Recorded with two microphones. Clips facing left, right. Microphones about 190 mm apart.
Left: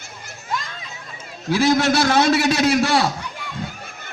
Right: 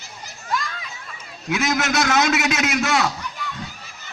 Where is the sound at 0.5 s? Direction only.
25° left (ahead or behind).